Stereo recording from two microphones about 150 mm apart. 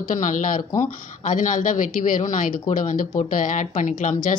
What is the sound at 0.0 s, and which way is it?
Speech, 60° left (ahead or behind).